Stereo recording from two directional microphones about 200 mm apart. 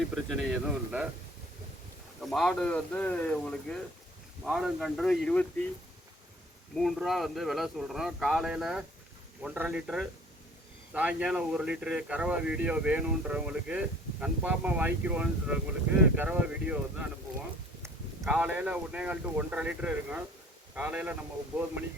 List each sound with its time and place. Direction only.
0.1 s speech: centre (ahead or behind)
2.2 s speech: centre (ahead or behind)
6.7 s speech: centre (ahead or behind)